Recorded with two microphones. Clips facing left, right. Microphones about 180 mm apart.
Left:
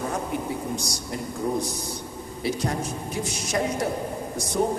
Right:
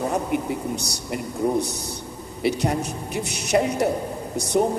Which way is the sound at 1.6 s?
65° right (ahead or behind).